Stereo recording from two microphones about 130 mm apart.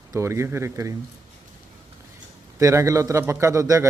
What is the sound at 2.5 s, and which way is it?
A man's voice, 20° right (ahead or behind).